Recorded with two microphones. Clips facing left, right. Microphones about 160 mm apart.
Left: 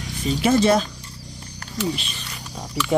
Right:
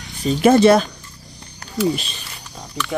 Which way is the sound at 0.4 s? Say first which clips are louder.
Right 6 dB; 60° right (ahead or behind).